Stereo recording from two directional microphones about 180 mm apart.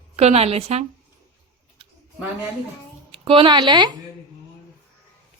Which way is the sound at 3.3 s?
25° right (ahead or behind).